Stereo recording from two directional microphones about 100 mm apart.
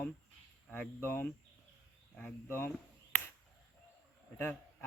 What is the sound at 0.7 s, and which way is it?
Speech, 20° left (ahead or behind).